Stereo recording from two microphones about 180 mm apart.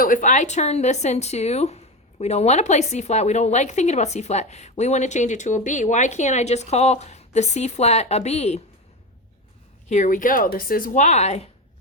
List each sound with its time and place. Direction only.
0.0 s speech: 45° left (ahead or behind)
9.9 s speech: 45° left (ahead or behind)